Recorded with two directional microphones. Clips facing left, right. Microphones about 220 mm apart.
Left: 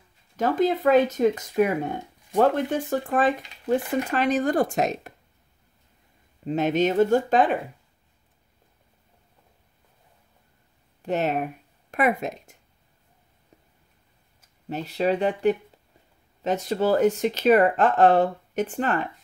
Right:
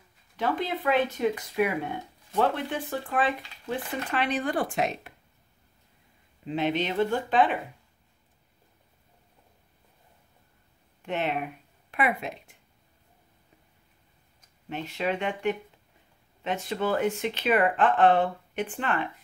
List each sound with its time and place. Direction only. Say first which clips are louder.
0.4 s speech: left 7 dB; 45° left (ahead or behind)
6.4 s speech: left 5 dB; 45° left (ahead or behind)
11.0 s speech: left 5 dB; 40° left (ahead or behind)
14.7 s speech: left 6 dB; 35° left (ahead or behind)